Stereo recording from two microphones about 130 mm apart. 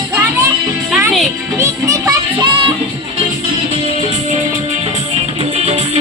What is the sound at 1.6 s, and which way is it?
Music, 25° right (ahead or behind).